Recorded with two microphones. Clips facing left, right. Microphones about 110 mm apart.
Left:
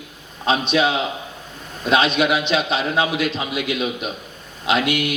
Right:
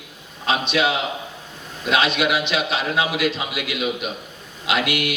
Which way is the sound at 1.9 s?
25° left (ahead or behind).